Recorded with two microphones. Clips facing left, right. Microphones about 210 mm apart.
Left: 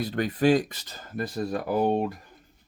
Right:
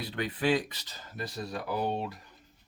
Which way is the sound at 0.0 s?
45° left (ahead or behind).